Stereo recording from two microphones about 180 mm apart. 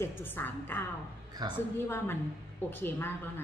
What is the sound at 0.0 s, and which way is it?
Speech, 10° left (ahead or behind).